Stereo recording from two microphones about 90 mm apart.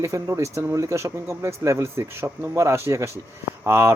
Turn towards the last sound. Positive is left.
turn(degrees=-25)  # may be behind; listen again after turning